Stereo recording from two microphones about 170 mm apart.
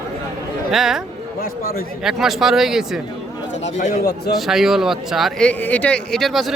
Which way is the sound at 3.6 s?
45° left (ahead or behind).